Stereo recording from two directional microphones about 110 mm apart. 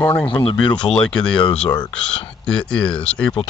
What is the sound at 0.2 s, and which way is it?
Speech, 50° left (ahead or behind).